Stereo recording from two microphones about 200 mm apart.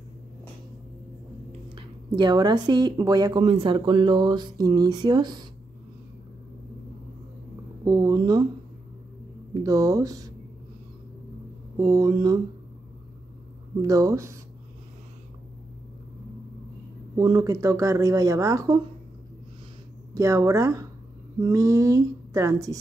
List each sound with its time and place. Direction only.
1.8 s a woman's voice: 20° right (ahead or behind)
7.8 s speech: 20° right (ahead or behind)
9.5 s speech: 15° right (ahead or behind)
11.8 s speech: 15° right (ahead or behind)
13.7 s speech: 15° right (ahead or behind)
17.2 s speech: 20° right (ahead or behind)
20.2 s speech: 15° right (ahead or behind)